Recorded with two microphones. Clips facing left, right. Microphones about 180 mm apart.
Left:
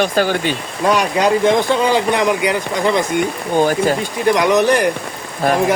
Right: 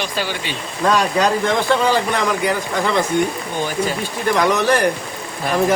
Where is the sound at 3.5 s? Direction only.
45° left (ahead or behind).